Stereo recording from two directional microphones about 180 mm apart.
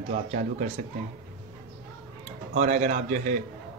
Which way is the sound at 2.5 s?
40° right (ahead or behind).